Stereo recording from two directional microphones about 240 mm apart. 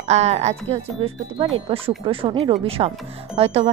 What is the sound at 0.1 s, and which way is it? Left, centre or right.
Speech, right.